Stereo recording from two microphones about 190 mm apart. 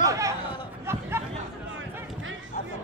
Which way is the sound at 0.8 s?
15° right (ahead or behind).